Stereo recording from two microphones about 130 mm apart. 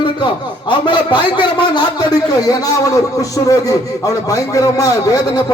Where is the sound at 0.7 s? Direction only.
35° left (ahead or behind).